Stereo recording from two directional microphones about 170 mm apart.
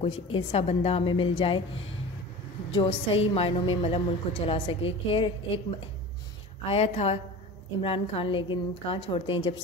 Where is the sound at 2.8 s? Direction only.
35° left (ahead or behind).